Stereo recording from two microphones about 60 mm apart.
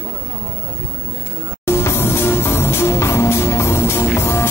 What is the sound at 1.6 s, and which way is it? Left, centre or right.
Music, left.